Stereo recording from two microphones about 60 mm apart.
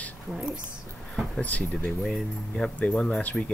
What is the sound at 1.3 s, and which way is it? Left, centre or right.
Speech, left.